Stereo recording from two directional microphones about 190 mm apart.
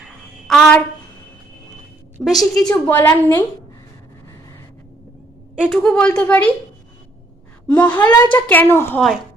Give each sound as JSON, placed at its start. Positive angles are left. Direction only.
{"t": 0.0, "sound": "a sound", "side_deg": 0}
{"t": 2.1, "sound": "a woman's voice", "side_deg": 0}
{"t": 2.4, "sound": "a woman's voice", "side_deg": 20}
{"t": 5.6, "sound": "a child's voice", "side_deg": 5}
{"t": 7.8, "sound": "a child's voice", "side_deg": 10}